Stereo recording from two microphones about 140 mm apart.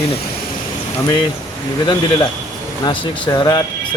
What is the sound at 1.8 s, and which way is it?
Speech, 30° left (ahead or behind).